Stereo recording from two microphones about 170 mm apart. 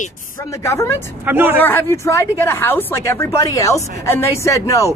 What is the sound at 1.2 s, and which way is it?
Speech, 10° right (ahead or behind).